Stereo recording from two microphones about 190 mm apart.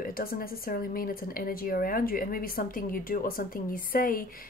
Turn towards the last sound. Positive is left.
turn(degrees=50)  # may be behind; listen again after turning